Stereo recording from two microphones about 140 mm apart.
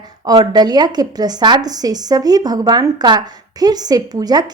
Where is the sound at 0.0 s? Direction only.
30° right (ahead or behind).